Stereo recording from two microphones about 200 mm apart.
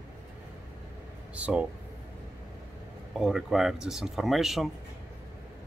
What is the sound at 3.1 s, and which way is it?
Speech, centre (ahead or behind).